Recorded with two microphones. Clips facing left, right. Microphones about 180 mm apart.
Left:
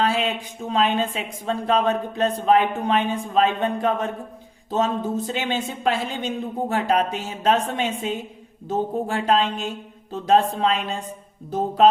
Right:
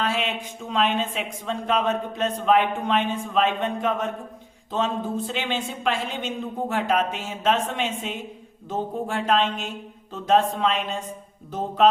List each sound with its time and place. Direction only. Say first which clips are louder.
0.0 s speech: left 4 dB; 35° left (ahead or behind)